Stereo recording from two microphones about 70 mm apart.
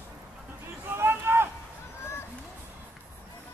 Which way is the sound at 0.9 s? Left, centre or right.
Right.